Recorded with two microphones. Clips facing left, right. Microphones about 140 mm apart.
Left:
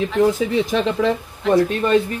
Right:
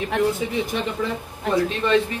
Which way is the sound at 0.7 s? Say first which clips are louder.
Left 7 dB; 90° left.